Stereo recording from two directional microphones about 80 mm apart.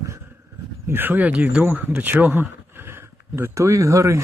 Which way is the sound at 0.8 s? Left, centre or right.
Right.